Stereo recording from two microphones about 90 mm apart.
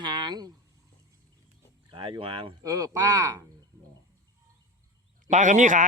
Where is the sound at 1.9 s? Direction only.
70° right (ahead or behind); by 2.5 s 85° right.